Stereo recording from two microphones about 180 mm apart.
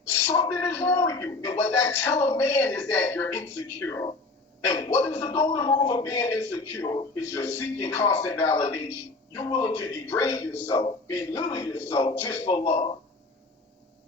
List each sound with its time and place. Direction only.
0.3 s a man's voice: 15° left (ahead or behind)
12.6 s speech: 35° left (ahead or behind)